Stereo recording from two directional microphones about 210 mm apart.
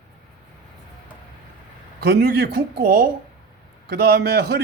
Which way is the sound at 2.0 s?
50° right (ahead or behind).